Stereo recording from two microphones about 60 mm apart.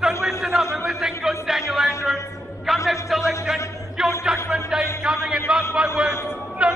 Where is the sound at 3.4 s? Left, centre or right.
Centre.